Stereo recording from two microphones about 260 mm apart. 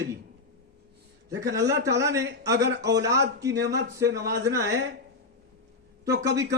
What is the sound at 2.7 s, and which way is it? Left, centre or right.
A man's voice, right.